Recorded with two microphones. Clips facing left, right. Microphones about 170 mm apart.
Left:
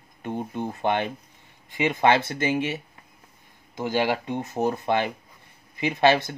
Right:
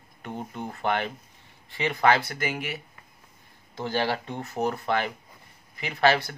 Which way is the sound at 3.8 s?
15° left (ahead or behind).